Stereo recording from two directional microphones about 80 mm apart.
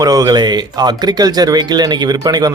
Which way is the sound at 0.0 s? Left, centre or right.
Right.